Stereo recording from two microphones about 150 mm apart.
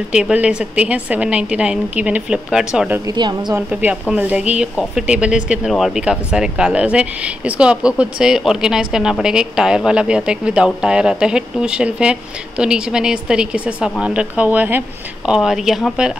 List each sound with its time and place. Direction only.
0.1 s a woman's voice: 5° right (ahead or behind)
3.1 s a woman's voice: 30° right (ahead or behind)
3.5 s a woman's voice: 10° right (ahead or behind)